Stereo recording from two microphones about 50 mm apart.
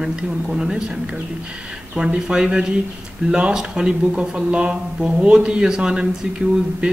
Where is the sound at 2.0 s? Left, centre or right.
Centre.